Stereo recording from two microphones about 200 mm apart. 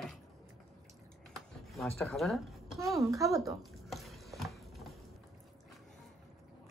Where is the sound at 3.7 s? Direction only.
Centre (ahead or behind).